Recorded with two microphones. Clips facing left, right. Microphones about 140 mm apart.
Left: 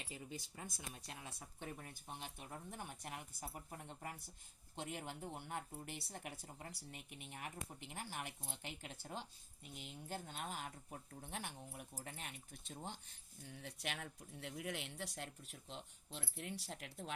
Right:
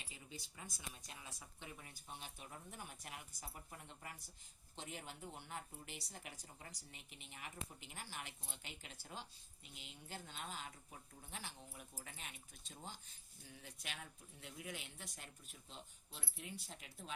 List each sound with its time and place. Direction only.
0.1 s speech: 50° left (ahead or behind); by 17.1 s 70° left (ahead or behind)